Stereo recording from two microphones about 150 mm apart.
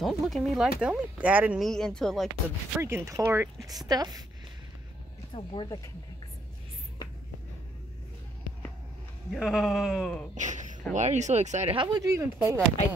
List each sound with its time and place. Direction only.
0.0 s speech: centre (ahead or behind)
1.6 s speech: 5° left (ahead or behind)
2.8 s speech: 20° right (ahead or behind)
5.3 s speech: 35° left (ahead or behind)
9.3 s speech: 5° right (ahead or behind)
10.3 s speech: 55° right (ahead or behind)
11.7 s speech: 30° right (ahead or behind)